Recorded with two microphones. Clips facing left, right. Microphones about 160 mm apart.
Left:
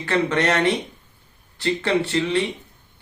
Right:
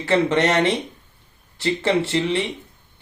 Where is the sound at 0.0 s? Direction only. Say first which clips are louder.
Right 2 dB; 25° right (ahead or behind).